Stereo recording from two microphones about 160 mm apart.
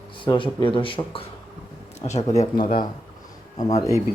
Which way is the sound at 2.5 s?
60° left (ahead or behind).